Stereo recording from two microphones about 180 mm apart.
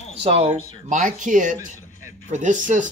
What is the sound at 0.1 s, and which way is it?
Speech, 35° right (ahead or behind).